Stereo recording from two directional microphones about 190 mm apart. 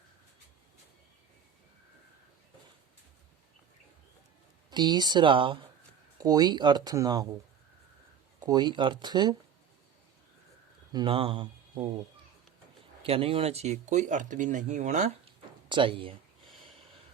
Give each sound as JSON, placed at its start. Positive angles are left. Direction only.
{"t": 4.7, "sound": "speech", "side_deg": -20}
{"t": 8.4, "sound": "speech", "side_deg": -20}
{"t": 10.9, "sound": "speech", "side_deg": -25}
{"t": 13.0, "sound": "speech", "side_deg": -30}
{"t": 15.7, "sound": "speech", "side_deg": -25}